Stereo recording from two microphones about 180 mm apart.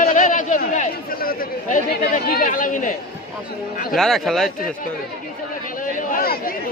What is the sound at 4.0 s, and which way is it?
Speech, centre (ahead or behind).